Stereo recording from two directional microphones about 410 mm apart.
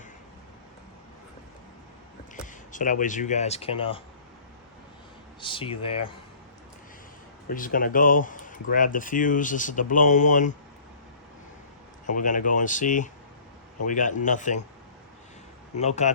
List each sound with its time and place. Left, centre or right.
2.3 s speech: centre
5.4 s speech: centre
7.4 s speech: centre
12.0 s speech: centre
15.8 s speech: centre